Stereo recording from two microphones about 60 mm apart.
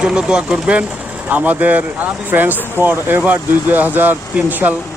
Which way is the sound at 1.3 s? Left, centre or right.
Right.